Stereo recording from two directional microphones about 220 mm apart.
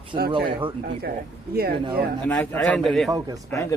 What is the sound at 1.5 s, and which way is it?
Speech, 45° right (ahead or behind).